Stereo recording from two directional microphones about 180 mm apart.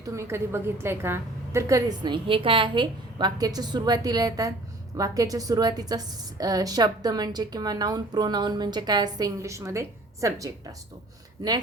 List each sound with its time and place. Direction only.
0.0 s a woman's voice: 15° right (ahead or behind)